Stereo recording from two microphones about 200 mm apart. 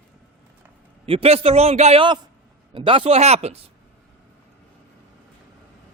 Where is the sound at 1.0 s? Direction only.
30° right (ahead or behind).